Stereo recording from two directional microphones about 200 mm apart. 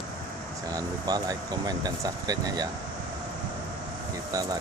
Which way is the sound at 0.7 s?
20° right (ahead or behind).